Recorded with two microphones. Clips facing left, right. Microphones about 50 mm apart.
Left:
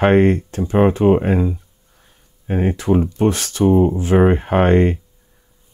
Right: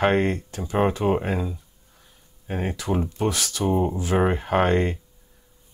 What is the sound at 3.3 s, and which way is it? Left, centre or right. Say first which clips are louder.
Speech: left 7 dB; left.